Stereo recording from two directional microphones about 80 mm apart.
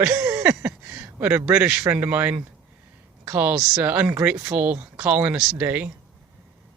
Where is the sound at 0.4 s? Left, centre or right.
Centre.